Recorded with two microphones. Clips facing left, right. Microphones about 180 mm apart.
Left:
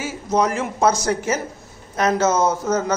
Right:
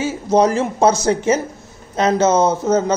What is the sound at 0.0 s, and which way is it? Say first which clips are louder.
A man's voice: right 5 dB; 30° right (ahead or behind).